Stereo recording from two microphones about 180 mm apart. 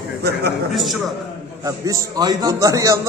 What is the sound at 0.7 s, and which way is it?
Speech, centre (ahead or behind).